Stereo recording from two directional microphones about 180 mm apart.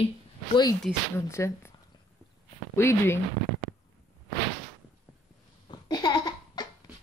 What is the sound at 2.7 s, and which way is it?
Speech, 15° left (ahead or behind).